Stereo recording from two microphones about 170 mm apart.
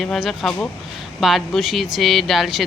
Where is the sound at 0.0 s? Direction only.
Centre (ahead or behind).